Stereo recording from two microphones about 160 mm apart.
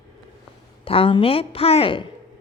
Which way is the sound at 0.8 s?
35° left (ahead or behind).